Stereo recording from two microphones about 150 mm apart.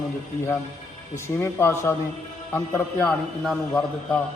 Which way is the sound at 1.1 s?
20° left (ahead or behind).